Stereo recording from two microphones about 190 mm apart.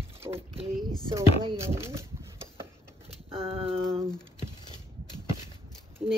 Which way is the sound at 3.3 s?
30° right (ahead or behind).